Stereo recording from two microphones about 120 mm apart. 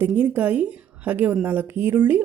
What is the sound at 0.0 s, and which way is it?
Speech, 15° right (ahead or behind).